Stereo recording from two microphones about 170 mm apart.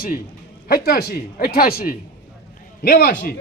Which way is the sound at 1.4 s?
60° left (ahead or behind).